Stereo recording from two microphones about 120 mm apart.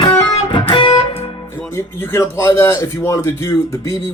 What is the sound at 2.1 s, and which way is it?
Speech, 20° left (ahead or behind).